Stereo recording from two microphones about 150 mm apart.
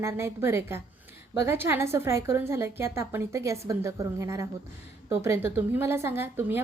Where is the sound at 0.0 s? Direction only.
15° right (ahead or behind).